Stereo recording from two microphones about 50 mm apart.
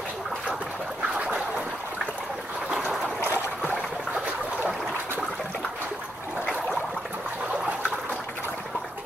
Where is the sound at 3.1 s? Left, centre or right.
Left.